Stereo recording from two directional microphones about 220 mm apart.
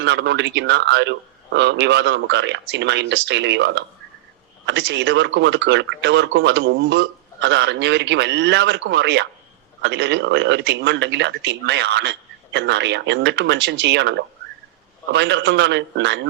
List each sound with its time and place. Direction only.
0.0 s speech: 55° right (ahead or behind)